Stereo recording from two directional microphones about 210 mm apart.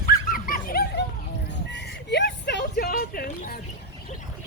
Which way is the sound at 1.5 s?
55° left (ahead or behind).